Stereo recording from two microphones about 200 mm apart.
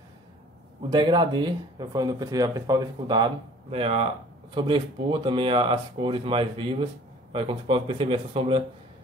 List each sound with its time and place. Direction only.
0.8 s speech: 20° right (ahead or behind)